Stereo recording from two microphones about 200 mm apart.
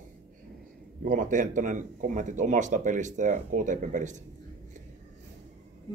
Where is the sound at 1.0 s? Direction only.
40° right (ahead or behind).